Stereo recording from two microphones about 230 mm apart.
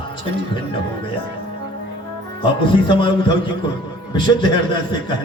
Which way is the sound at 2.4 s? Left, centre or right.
Left.